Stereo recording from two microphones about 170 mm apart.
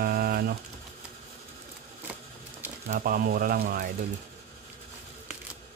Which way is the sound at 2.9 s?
60° right (ahead or behind).